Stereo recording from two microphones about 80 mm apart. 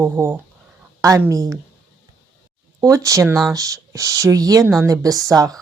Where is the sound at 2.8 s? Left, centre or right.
Right.